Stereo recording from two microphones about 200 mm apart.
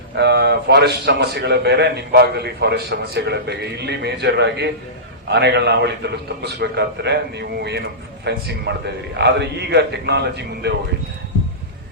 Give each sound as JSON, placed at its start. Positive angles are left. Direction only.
{"t": 0.2, "sound": "a man's voice", "side_deg": -55}